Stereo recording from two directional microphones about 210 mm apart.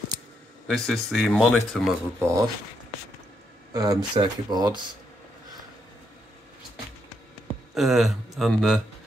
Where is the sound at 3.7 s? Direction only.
15° right (ahead or behind).